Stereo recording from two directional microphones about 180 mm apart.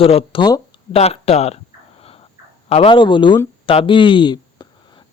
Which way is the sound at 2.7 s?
30° left (ahead or behind).